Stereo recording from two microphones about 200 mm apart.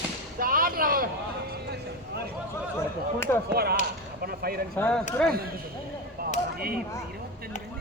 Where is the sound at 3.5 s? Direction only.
50° right (ahead or behind).